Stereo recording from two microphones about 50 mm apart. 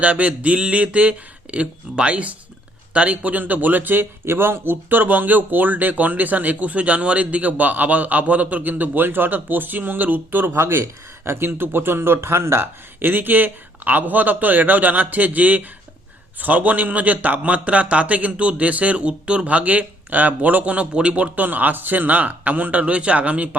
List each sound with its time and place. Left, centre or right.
0.0 s a man's voice: right
4.3 s speech: right
13.1 s a man's voice: right